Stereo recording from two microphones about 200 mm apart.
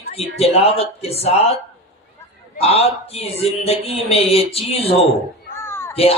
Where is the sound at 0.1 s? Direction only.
30° left (ahead or behind).